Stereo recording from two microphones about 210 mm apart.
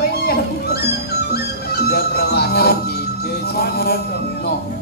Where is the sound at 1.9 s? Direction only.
50° left (ahead or behind).